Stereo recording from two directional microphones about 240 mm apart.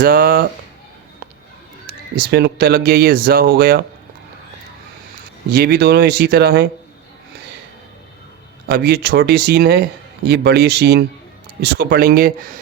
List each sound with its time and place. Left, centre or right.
0.0 s speech: right
2.1 s speech: right
5.5 s speech: right
8.6 s speech: right